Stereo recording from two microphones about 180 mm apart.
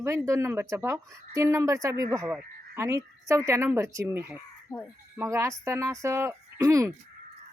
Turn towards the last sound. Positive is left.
turn(degrees=-15)  # may be behind; listen again after turning